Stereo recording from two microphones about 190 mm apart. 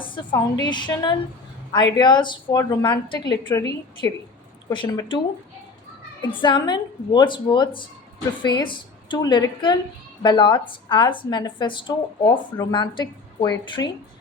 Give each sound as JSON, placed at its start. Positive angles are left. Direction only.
{"t": 0.0, "sound": "a sound", "side_deg": 25}
{"t": 0.3, "sound": "a woman's voice", "side_deg": 20}
{"t": 6.2, "sound": "a woman's voice", "side_deg": 25}